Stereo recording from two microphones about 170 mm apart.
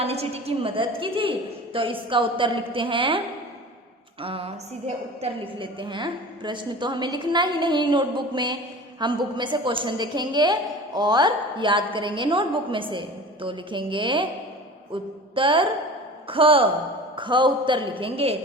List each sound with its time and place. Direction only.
0.0 s a woman's voice: 35° right (ahead or behind)
4.2 s a woman's voice: 30° right (ahead or behind)